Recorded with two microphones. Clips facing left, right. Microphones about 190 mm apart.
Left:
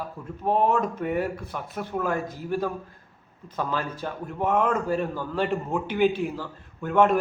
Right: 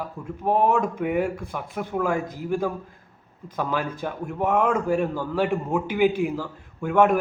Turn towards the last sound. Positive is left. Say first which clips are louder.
# right 1 dB
turn(degrees=-10)  # may be behind; listen again after turning